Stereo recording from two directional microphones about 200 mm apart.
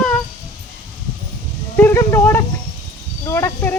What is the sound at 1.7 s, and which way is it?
Speech, 10° left (ahead or behind).